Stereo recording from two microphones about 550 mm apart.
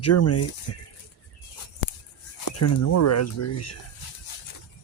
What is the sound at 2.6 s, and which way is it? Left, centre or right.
Speech, left.